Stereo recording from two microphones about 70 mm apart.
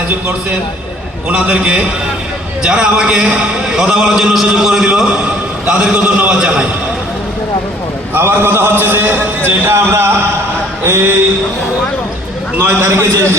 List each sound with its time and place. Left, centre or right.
1.3 s a man's voice: centre
8.1 s a man's voice: right
12.5 s a man's voice: right